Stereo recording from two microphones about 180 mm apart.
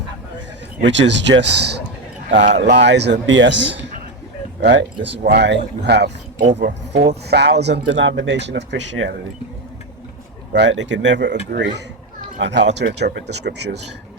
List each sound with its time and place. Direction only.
0.8 s speech: 85° right
10.5 s speech: 80° right